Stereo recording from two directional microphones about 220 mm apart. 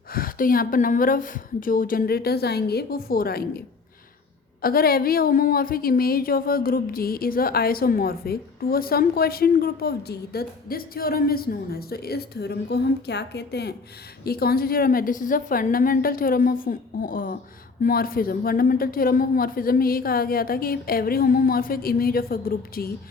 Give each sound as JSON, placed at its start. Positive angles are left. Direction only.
{"t": 0.1, "sound": "a woman's voice", "side_deg": 40}
{"t": 4.6, "sound": "a woman's voice", "side_deg": 45}